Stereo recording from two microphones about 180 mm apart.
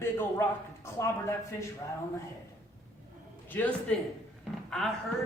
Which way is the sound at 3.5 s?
10° left (ahead or behind).